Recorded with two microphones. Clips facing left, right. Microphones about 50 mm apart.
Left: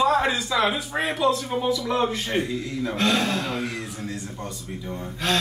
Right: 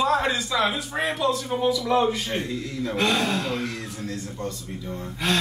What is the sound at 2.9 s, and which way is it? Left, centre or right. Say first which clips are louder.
Speech: even; centre.